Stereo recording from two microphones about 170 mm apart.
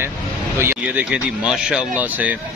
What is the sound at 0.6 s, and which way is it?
Speech, 10° right (ahead or behind).